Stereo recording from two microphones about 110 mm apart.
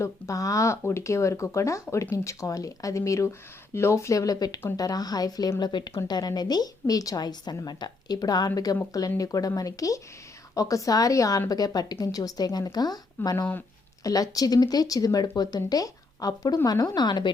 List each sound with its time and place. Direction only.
0.0 s a woman's voice: 30° left (ahead or behind)
13.3 s speech: 15° left (ahead or behind)
14.0 s a woman's voice: 35° left (ahead or behind)